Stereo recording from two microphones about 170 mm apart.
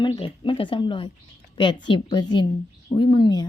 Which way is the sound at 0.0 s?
30° left (ahead or behind).